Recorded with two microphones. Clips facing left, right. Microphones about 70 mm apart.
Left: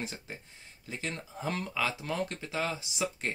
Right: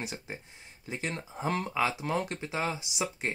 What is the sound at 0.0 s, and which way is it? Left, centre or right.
Speech, centre.